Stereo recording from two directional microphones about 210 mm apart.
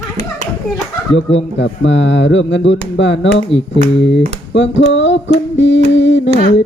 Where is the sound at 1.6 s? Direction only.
60° left (ahead or behind).